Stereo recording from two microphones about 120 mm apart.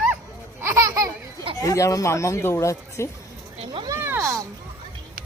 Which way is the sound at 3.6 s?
45° right (ahead or behind).